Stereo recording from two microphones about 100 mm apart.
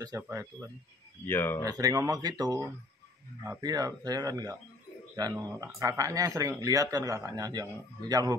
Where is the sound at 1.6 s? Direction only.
35° right (ahead or behind).